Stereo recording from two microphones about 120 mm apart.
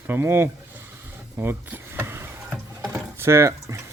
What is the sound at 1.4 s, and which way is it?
Vehicle, 20° right (ahead or behind).